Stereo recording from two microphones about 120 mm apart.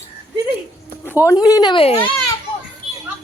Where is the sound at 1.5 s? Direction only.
30° left (ahead or behind).